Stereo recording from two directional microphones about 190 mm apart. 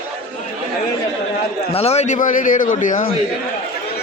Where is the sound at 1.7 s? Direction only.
30° left (ahead or behind).